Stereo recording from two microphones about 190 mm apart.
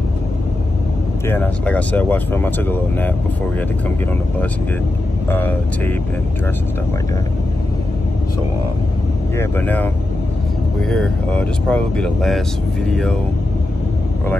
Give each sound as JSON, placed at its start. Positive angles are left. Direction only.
{"t": 1.2, "sound": "speech", "side_deg": 10}
{"t": 5.3, "sound": "speech", "side_deg": 10}
{"t": 9.4, "sound": "speech", "side_deg": 10}
{"t": 10.9, "sound": "speech", "side_deg": 5}